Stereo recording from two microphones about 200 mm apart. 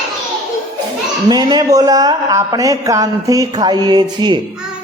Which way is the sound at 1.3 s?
20° right (ahead or behind).